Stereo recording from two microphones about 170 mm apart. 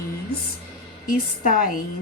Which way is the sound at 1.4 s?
50° left (ahead or behind).